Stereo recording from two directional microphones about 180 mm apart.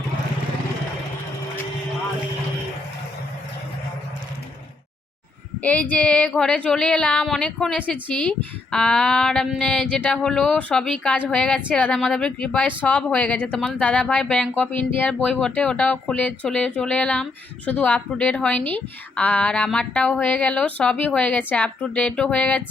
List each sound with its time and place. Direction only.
5.9 s a woman's voice: 5° left (ahead or behind)